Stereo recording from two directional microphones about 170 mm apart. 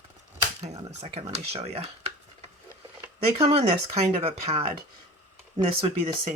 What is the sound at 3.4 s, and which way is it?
Speech, 35° right (ahead or behind).